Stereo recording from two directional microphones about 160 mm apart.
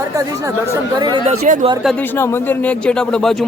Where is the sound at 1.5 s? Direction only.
50° right (ahead or behind).